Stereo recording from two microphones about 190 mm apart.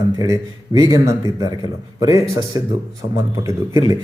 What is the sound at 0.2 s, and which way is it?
Speech, 20° right (ahead or behind).